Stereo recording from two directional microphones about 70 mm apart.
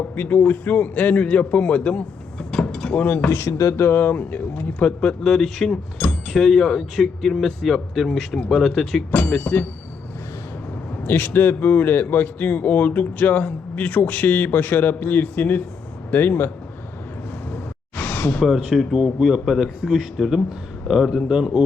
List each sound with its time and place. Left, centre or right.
0.2 s a man's voice: left
2.5 s mechanisms: centre; by 3.5 s left
3.6 s a man's voice: left; by 9.0 s centre
9.3 s speech: centre
11.0 s a man's voice: left
17.5 s a sound: left
18.4 s a man's voice: centre